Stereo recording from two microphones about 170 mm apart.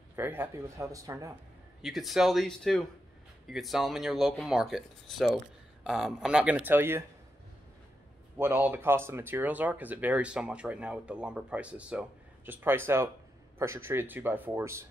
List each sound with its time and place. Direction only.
0.1 s speech: 10° right (ahead or behind)
1.8 s speech: centre (ahead or behind)
8.4 s speech: 10° right (ahead or behind)